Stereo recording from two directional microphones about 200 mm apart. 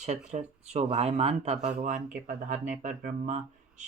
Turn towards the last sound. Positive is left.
turn(degrees=-35)  # may be behind; listen again after turning